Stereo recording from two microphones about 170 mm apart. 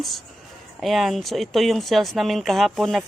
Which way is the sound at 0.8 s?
Centre (ahead or behind).